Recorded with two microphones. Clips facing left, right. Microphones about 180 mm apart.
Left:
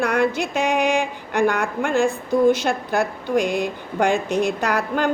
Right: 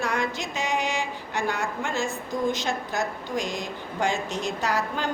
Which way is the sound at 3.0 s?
10° left (ahead or behind).